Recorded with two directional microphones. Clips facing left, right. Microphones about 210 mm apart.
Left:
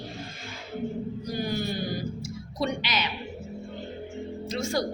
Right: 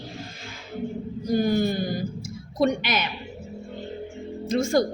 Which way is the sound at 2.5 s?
50° right (ahead or behind).